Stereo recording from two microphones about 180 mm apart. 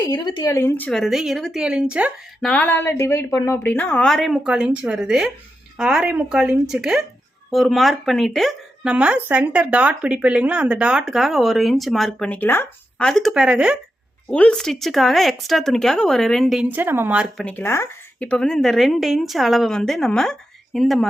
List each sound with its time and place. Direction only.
0.0 s speech: 25° left (ahead or behind)
0.9 s speech: centre (ahead or behind)
2.5 s a woman's voice: 10° left (ahead or behind)
14.3 s speech: 5° left (ahead or behind); by 17.2 s 10° right (ahead or behind)
17.3 s speech: 10° left (ahead or behind)